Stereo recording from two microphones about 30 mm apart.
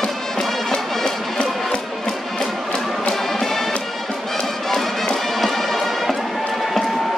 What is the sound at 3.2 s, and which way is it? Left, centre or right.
Music, centre.